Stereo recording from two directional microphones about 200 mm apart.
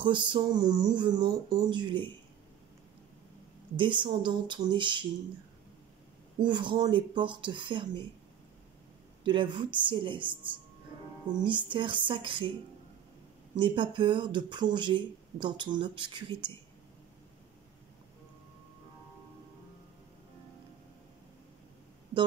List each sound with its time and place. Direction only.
0.0 s speech: 25° right (ahead or behind)
3.7 s speech: 25° right (ahead or behind)
6.4 s speech: 20° right (ahead or behind)
9.2 s speech: 25° right (ahead or behind)
13.6 s speech: 25° right (ahead or behind)